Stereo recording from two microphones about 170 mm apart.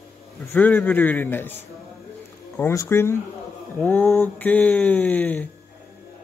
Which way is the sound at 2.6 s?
15° left (ahead or behind).